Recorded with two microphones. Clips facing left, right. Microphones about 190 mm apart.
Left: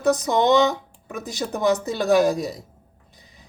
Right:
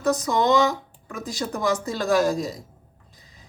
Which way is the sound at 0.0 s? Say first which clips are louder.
Left 2 dB; 20° left (ahead or behind).